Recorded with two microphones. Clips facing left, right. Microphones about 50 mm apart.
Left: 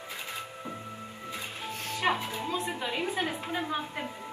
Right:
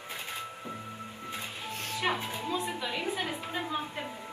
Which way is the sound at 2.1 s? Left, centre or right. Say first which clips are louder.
Left 3 dB; centre.